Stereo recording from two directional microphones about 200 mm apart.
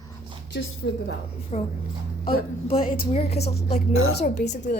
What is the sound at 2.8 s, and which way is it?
Speech, 45° left (ahead or behind).